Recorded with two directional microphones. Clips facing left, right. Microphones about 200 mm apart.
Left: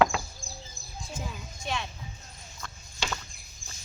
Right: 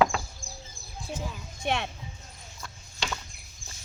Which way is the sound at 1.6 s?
65° right (ahead or behind).